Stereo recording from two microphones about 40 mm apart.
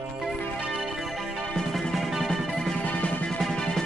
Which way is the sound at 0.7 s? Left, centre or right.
Centre.